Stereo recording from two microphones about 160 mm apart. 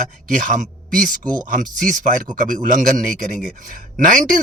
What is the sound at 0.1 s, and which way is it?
Speech, 55° right (ahead or behind).